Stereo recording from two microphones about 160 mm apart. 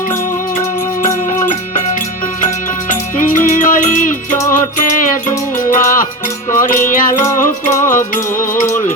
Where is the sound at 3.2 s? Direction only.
55° left (ahead or behind).